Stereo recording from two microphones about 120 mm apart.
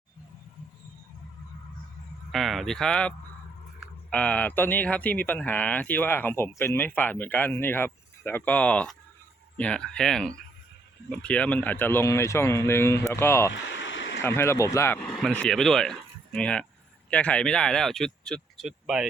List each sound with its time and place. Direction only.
2.3 s speech: centre (ahead or behind); by 15.0 s 20° left (ahead or behind)
15.2 s speech: 10° left (ahead or behind)